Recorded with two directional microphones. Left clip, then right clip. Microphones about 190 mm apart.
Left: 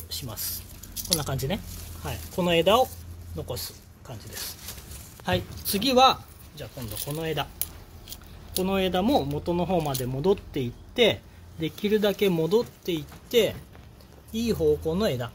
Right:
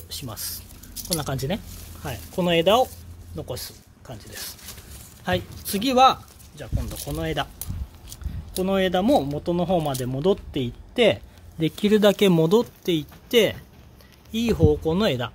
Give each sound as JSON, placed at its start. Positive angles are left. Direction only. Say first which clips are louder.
{"t": 0.1, "sound": "speech", "louder": "right 1 dB", "side_deg": -45}
{"t": 8.5, "sound": "speech", "louder": "right 3 dB", "side_deg": -40}
{"t": 11.6, "sound": "speech", "louder": "right 6 dB", "side_deg": -50}